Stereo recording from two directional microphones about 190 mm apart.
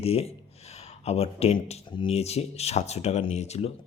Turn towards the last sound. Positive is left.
turn(degrees=35)  # may be behind; listen again after turning